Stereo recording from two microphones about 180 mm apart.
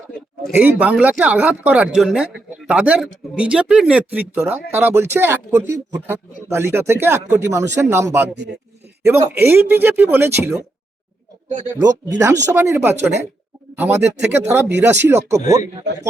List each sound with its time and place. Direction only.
0.4 s a man's voice: 5° right (ahead or behind)
12.2 s a man's voice: 10° right (ahead or behind)